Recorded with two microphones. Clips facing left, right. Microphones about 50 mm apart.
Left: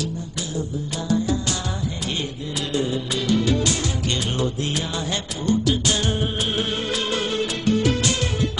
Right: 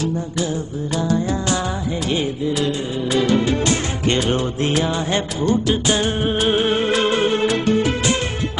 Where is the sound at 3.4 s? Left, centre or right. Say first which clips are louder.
Right 3 dB; right.